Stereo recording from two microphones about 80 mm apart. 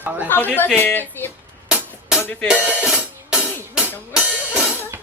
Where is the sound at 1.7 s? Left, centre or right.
Centre.